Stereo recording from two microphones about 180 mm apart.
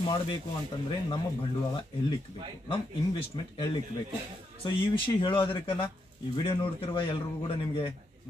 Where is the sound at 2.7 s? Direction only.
30° left (ahead or behind).